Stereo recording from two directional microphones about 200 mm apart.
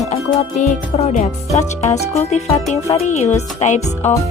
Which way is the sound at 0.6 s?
35° left (ahead or behind).